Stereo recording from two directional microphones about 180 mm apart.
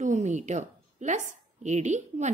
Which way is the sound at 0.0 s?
40° right (ahead or behind).